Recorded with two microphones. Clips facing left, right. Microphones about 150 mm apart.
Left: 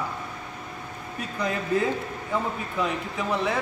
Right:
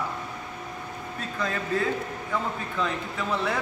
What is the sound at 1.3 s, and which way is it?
Speech, 20° left (ahead or behind).